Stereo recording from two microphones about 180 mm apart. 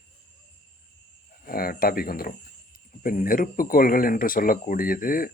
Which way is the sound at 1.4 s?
55° left (ahead or behind).